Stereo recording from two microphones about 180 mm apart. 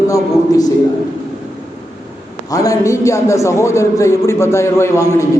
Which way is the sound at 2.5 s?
20° left (ahead or behind).